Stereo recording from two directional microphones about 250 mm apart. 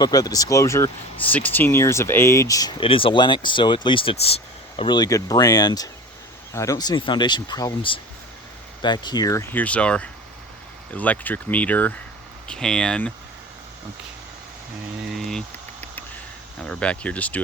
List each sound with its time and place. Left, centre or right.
0.0 s speech: centre
15.1 s a sound: centre
16.6 s speech: centre